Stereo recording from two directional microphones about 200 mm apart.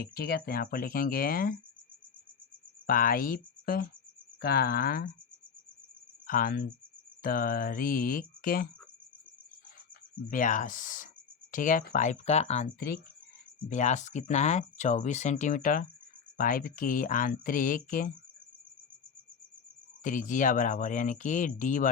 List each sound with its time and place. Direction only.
0.0 s speech: 50° left (ahead or behind)
2.8 s speech: 45° left (ahead or behind)
6.2 s speech: 45° left (ahead or behind)
10.2 s speech: 40° left (ahead or behind)
20.1 s speech: 40° left (ahead or behind)